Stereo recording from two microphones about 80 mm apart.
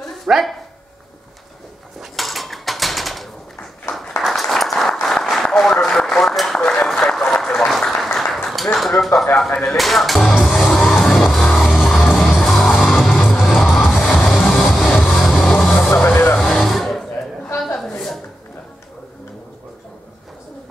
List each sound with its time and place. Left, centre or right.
0.3 s speech: centre
2.0 s dishes: centre
4.2 s a sound: centre
6.6 s applause: centre
8.7 s a sound: centre
9.5 s speech: centre
9.8 s music: centre
15.9 s vehicle: left
16.3 s vehicle: centre
17.7 s a sound: centre